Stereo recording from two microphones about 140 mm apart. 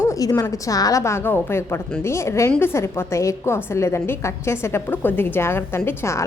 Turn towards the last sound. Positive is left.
turn(degrees=20)  # may be behind; listen again after turning